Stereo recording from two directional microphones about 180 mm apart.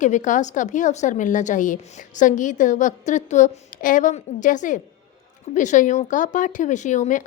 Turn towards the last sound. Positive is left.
turn(degrees=45)  # may be behind; listen again after turning